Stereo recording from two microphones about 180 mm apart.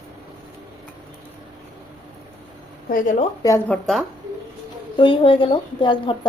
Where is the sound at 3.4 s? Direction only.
15° left (ahead or behind).